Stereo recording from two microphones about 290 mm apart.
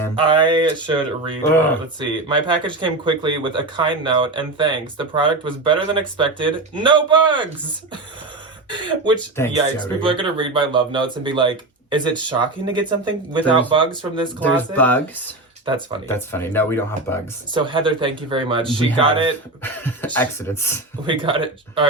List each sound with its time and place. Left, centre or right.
0.2 s speech: centre
8.7 s speech: centre
9.3 s speech: centre
10.0 s speech: centre
14.4 s speech: centre
15.6 s speech: centre
16.0 s speech: centre
17.5 s speech: centre
19.6 s speech: centre
21.1 s speech: centre